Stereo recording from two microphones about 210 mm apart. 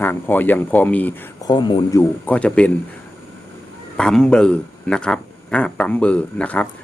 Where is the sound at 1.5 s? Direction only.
20° left (ahead or behind).